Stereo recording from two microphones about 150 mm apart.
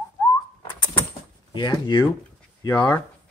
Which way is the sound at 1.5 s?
30° left (ahead or behind).